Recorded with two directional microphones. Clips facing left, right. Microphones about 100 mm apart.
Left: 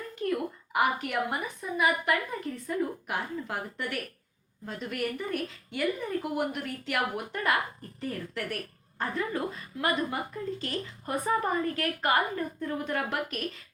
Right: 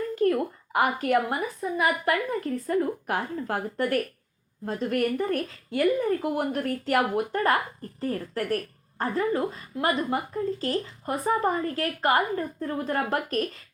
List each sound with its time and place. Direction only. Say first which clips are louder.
0.3 s a woman's voice: right 6 dB; 30° right (ahead or behind)